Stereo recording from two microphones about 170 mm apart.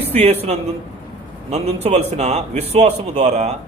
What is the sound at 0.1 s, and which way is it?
A man's voice, 40° right (ahead or behind).